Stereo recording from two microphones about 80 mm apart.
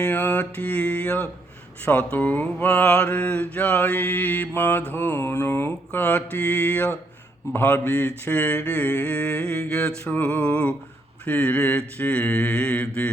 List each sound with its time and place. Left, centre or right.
0.0 s mantra: left